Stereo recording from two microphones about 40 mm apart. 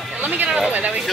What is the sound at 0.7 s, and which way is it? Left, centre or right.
Speech, right.